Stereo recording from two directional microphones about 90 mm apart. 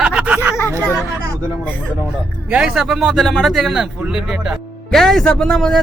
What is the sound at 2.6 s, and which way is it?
Speech, 5° right (ahead or behind).